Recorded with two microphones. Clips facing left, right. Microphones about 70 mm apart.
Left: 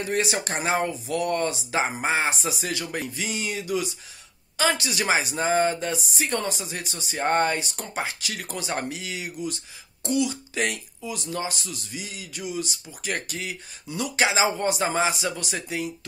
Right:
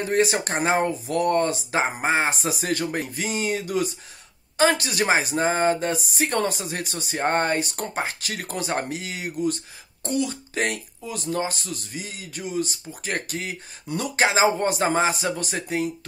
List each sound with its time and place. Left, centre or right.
0.0 s speech: right